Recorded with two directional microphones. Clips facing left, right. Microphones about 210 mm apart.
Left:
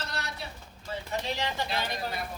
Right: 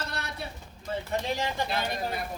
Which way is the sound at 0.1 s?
55° right (ahead or behind).